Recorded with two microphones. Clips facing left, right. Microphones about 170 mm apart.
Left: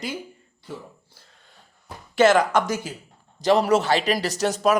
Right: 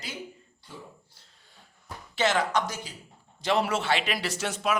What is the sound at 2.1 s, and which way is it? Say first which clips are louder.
Speech: left 8 dB; 45° left (ahead or behind).